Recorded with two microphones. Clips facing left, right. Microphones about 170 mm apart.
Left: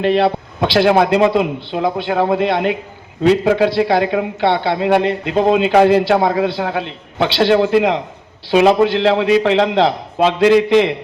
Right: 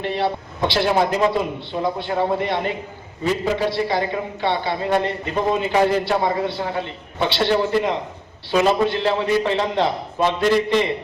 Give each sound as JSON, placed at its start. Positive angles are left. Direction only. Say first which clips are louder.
{"t": 0.0, "sound": "a man's voice", "louder": "left 8 dB", "side_deg": 80}